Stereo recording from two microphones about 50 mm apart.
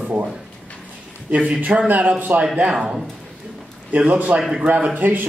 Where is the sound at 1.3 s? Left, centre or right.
Right.